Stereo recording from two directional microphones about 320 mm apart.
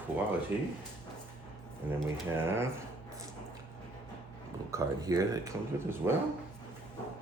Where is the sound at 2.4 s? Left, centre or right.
Centre.